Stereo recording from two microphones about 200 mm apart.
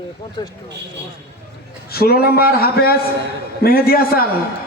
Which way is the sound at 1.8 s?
50° left (ahead or behind).